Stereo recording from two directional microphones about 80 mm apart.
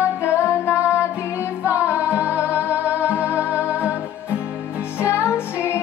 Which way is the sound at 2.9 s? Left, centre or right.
Centre.